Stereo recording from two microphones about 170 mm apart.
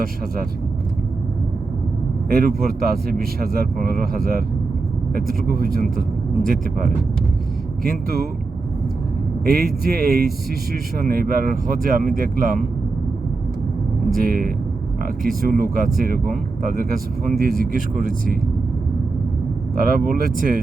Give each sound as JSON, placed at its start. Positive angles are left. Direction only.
{"t": 2.3, "sound": "a man's voice", "side_deg": -60}
{"t": 9.4, "sound": "a man's voice", "side_deg": -60}
{"t": 14.1, "sound": "a man's voice", "side_deg": -55}
{"t": 19.7, "sound": "a man's voice", "side_deg": -60}